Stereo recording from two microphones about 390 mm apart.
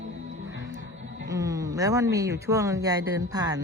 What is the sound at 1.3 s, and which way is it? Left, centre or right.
Speech, centre.